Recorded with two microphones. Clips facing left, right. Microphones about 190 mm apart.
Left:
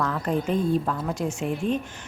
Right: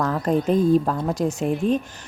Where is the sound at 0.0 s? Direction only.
40° right (ahead or behind).